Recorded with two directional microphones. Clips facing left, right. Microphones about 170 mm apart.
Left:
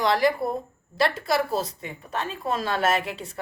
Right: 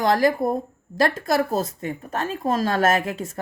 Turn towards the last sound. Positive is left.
turn(degrees=-45)  # may be behind; listen again after turning